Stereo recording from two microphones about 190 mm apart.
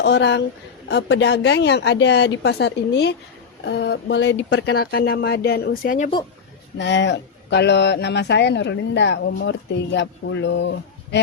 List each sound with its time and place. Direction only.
0.0 s a woman's voice: 65° left (ahead or behind); by 6.1 s 50° left (ahead or behind)
6.7 s speech: 70° left (ahead or behind)